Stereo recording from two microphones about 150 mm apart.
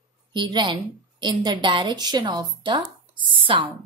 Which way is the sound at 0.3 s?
30° right (ahead or behind).